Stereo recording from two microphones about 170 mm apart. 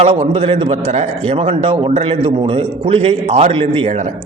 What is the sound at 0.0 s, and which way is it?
A man's voice, 35° right (ahead or behind).